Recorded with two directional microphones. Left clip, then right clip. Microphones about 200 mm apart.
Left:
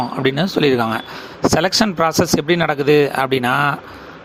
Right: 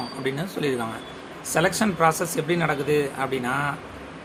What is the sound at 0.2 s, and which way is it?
Speech, 45° left (ahead or behind).